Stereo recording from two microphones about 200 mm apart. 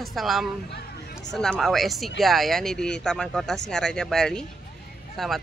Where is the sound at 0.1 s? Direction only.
Centre (ahead or behind).